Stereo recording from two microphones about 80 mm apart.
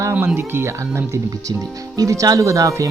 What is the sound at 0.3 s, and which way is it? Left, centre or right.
Speech, right.